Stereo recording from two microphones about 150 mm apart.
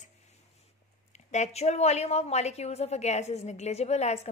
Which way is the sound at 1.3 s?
50° left (ahead or behind).